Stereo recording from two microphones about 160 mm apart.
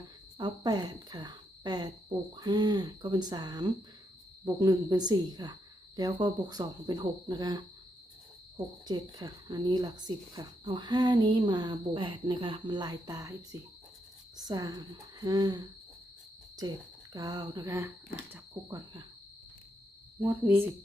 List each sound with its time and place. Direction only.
0.3 s speech: 25° right (ahead or behind)
20.2 s speech: 10° right (ahead or behind)